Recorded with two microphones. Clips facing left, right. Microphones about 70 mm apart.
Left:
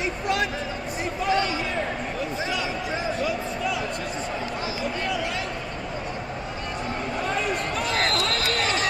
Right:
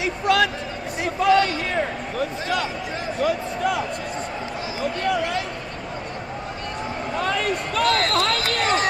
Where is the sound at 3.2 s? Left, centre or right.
Right.